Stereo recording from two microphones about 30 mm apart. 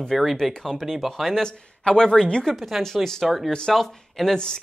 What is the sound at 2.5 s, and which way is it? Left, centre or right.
Speech, centre.